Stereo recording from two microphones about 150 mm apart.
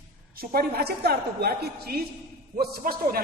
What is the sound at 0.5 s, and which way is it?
A man's voice, 90° right.